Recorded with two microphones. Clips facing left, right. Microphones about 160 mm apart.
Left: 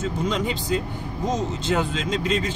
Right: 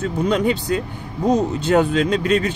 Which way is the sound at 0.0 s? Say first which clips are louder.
Right 6 dB; 60° right (ahead or behind).